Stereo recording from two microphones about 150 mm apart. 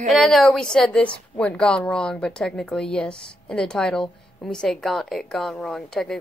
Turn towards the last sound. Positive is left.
turn(degrees=5)  # may be behind; listen again after turning